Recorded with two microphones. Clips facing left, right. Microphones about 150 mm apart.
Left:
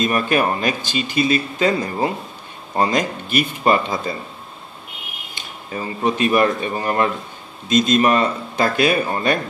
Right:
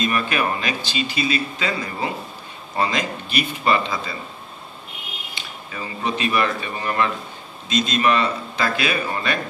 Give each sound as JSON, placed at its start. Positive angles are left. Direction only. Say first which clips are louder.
{"t": 0.0, "sound": "speech", "louder": "left 4 dB", "side_deg": 45}
{"t": 5.3, "sound": "speech", "louder": "left 7 dB", "side_deg": 45}